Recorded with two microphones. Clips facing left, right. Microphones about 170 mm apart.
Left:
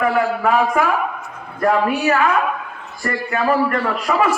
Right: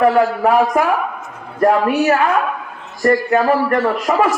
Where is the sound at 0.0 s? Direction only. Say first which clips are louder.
Right 4 dB; 40° right (ahead or behind).